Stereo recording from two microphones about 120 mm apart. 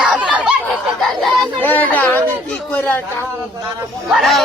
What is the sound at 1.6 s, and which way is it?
A man's voice, 15° left (ahead or behind).